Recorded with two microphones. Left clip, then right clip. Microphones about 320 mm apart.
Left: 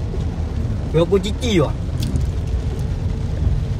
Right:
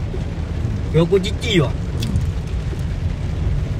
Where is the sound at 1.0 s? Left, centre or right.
Left.